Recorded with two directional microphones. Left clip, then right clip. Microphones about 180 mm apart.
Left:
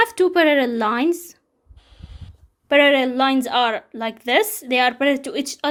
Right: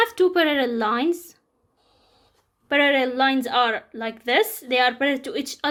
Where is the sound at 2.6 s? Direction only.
35° left (ahead or behind).